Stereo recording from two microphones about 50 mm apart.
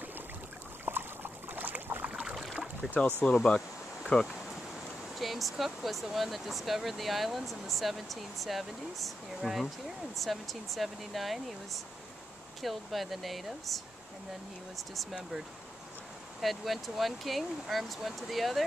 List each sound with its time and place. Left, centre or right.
0.8 s boat: right
2.3 s boat: centre
3.2 s speech: centre
3.5 s a sound: centre
5.2 s speech: centre
16.3 s speech: centre